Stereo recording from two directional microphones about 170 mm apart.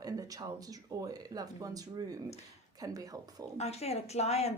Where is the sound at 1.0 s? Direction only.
20° right (ahead or behind).